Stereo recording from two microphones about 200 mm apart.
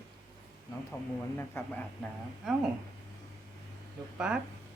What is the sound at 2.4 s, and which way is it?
Speech, centre (ahead or behind).